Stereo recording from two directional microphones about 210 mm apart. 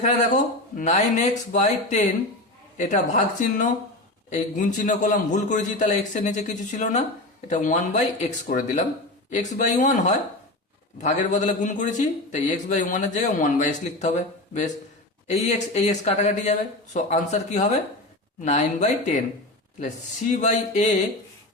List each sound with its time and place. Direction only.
0.0 s a man's voice: 35° left (ahead or behind)
20.3 s a man's voice: 35° left (ahead or behind)